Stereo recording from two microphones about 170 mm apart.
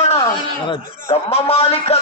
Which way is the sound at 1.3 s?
35° left (ahead or behind).